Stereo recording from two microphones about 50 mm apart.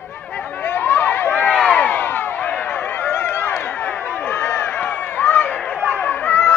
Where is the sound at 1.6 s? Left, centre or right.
Left.